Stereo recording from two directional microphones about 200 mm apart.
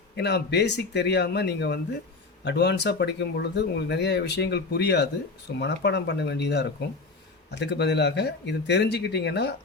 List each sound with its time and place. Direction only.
0.2 s speech: 55° left (ahead or behind)